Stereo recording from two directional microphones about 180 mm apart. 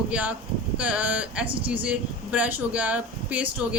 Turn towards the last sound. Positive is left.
turn(degrees=-5)  # may be behind; listen again after turning